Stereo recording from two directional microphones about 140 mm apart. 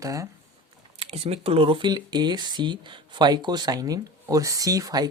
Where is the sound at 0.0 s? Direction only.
25° right (ahead or behind).